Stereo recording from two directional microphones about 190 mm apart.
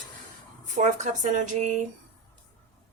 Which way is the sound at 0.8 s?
40° right (ahead or behind).